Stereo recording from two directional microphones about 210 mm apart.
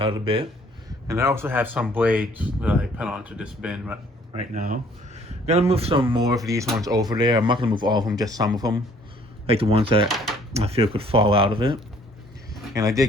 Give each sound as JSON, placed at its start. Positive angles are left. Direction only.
{"t": 0.0, "sound": "speech", "side_deg": -25}
{"t": 1.0, "sound": "speech", "side_deg": -15}
{"t": 4.5, "sound": "speech", "side_deg": -40}
{"t": 10.1, "sound": "speech", "side_deg": 0}
{"t": 10.5, "sound": "speech", "side_deg": -30}